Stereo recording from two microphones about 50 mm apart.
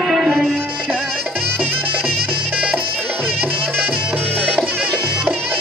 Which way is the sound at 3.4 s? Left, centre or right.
Right.